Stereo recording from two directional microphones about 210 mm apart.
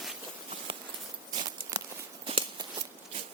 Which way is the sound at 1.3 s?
20° right (ahead or behind).